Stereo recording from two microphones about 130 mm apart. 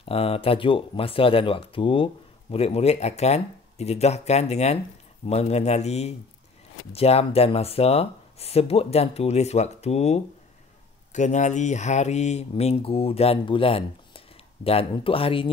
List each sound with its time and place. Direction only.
0.0 s speech: 45° left (ahead or behind)
11.1 s speech: 70° left (ahead or behind); by 15.5 s 45° left (ahead or behind)